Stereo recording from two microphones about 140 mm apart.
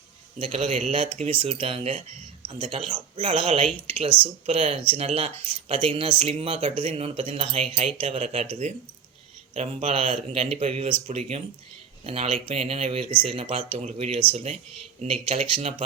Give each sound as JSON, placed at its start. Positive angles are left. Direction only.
{"t": 0.3, "sound": "speech", "side_deg": -40}
{"t": 9.6, "sound": "speech", "side_deg": -40}